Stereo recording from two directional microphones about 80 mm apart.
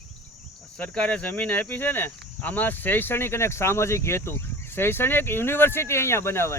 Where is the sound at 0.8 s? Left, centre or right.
Centre.